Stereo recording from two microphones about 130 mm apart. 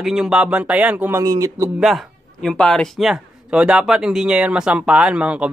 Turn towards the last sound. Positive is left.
turn(degrees=-10)  # may be behind; listen again after turning